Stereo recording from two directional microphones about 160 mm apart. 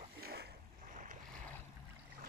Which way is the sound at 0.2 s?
90° right.